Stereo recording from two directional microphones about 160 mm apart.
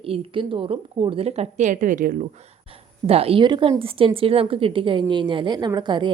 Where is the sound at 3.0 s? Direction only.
35° right (ahead or behind).